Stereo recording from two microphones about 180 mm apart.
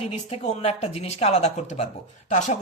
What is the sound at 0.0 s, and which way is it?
A man's voice, 35° left (ahead or behind).